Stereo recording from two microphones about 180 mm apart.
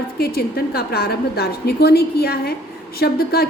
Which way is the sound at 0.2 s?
60° left (ahead or behind).